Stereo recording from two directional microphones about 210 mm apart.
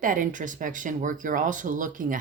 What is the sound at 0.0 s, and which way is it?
Speech, 40° right (ahead or behind).